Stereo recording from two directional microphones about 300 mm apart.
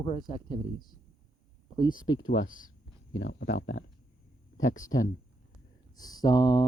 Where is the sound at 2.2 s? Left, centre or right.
Left.